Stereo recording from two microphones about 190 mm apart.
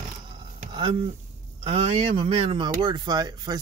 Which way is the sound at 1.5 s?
30° right (ahead or behind).